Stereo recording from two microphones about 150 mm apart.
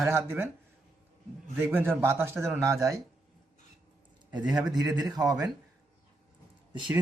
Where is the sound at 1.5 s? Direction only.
15° right (ahead or behind).